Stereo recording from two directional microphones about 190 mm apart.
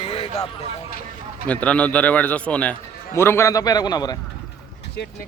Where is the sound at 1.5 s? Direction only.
5° left (ahead or behind).